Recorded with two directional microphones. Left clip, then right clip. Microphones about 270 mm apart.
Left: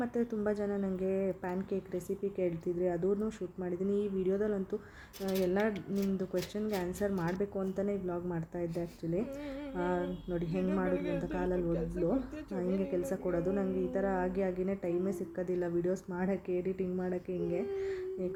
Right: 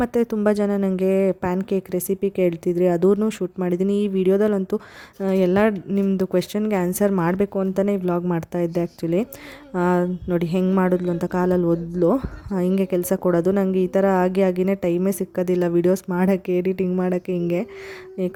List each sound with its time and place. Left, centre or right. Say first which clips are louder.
0.0 s a woman's voice: right 14 dB; right